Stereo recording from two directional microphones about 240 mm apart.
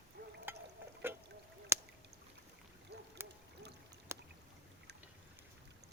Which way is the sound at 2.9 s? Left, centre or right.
Right.